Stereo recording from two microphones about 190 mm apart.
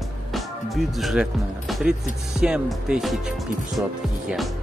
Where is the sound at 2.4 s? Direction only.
5° right (ahead or behind).